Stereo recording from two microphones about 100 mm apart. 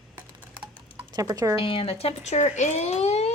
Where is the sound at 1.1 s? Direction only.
40° right (ahead or behind).